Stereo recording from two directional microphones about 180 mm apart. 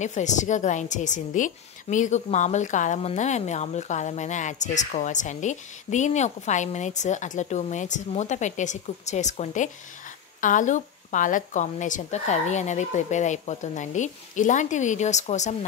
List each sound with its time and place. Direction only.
0.0 s a woman's voice: 40° left (ahead or behind)